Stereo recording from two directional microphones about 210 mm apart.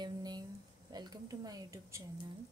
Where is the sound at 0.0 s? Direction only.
20° right (ahead or behind).